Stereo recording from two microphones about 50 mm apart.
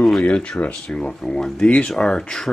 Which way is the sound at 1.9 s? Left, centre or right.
Centre.